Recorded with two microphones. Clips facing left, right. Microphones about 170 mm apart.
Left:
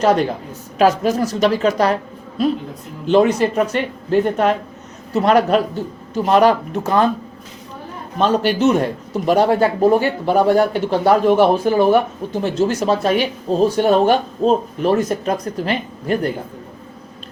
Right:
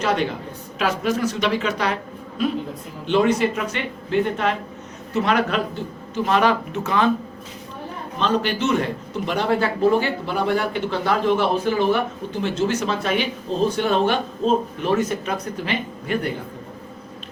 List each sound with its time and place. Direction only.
0.0 s speech: 40° left (ahead or behind)
3.1 s speech: 40° left (ahead or behind)
8.2 s speech: 45° left (ahead or behind)